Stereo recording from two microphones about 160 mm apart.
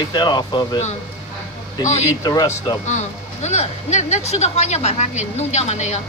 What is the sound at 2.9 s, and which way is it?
Speech, 45° left (ahead or behind).